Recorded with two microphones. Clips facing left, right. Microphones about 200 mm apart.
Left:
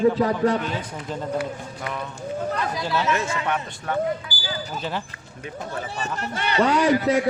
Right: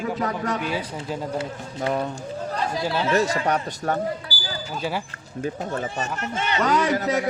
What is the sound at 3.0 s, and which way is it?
A man's voice, 35° right (ahead or behind).